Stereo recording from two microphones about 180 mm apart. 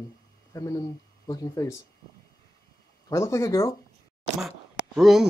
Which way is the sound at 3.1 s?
15° left (ahead or behind).